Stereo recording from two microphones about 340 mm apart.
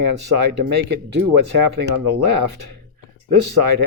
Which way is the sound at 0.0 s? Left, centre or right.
Right.